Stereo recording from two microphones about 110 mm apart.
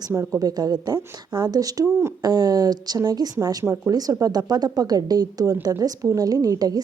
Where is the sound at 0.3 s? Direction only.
35° right (ahead or behind).